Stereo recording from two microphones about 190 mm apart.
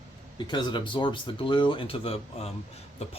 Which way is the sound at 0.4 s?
25° left (ahead or behind).